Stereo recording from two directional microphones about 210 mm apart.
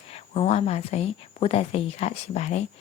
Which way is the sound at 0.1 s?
30° left (ahead or behind).